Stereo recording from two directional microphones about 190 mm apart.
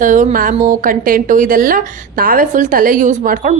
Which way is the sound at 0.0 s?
40° right (ahead or behind).